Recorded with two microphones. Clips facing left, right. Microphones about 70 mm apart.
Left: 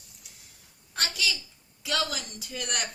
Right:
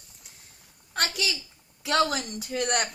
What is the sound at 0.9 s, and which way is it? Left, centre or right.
A woman's voice, right.